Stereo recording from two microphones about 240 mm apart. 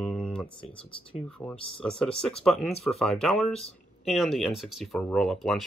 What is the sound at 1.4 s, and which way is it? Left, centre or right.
Speech, centre.